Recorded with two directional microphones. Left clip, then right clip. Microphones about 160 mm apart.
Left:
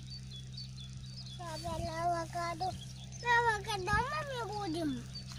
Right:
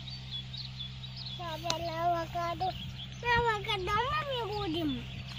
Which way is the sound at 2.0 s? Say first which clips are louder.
Right 2 dB; 20° left (ahead or behind).